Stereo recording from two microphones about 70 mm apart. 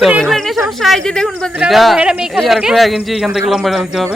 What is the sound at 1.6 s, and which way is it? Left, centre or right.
Speech, centre.